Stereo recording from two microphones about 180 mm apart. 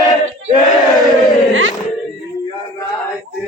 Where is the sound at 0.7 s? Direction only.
Centre (ahead or behind).